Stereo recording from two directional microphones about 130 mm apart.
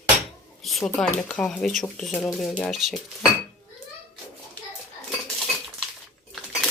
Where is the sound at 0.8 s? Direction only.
10° left (ahead or behind).